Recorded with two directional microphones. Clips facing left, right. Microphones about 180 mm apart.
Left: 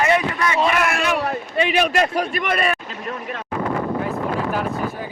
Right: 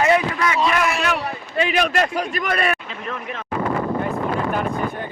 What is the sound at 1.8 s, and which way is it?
Speech, 10° left (ahead or behind).